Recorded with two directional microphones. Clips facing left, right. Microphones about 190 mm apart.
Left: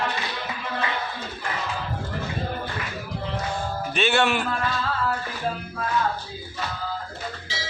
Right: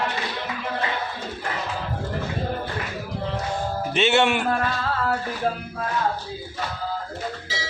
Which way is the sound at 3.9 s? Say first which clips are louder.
Right 2 dB; 20° right (ahead or behind).